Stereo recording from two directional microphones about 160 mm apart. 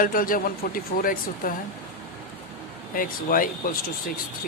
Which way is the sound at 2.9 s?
60° left (ahead or behind).